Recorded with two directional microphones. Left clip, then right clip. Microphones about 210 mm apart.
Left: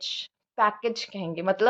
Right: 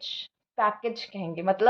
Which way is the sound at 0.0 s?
25° left (ahead or behind).